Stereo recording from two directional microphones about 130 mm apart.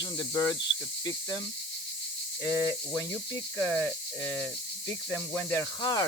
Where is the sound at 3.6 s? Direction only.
15° left (ahead or behind).